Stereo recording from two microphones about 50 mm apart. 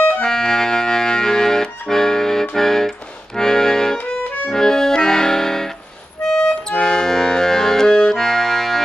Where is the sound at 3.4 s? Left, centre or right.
Centre.